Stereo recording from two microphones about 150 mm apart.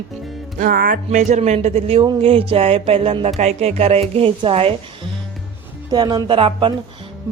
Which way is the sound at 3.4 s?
45° right (ahead or behind).